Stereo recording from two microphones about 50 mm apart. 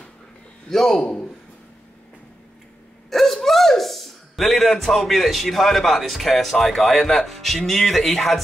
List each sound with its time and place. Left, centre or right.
0.7 s a man's voice: centre
3.1 s speech: centre